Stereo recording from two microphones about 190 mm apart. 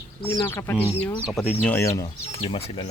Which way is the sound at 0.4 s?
15° left (ahead or behind).